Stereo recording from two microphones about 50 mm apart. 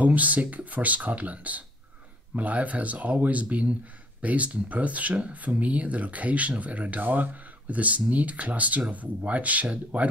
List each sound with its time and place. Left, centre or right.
0.0 s speech: right